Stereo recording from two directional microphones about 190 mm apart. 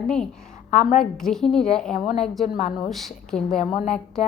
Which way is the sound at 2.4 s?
35° left (ahead or behind).